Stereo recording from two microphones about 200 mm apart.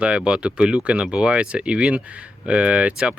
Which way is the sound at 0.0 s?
5° right (ahead or behind).